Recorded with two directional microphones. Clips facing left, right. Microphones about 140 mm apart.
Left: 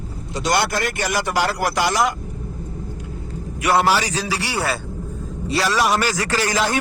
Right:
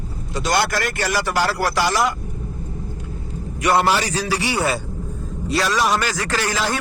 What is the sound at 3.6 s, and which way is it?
Speech, 5° left (ahead or behind).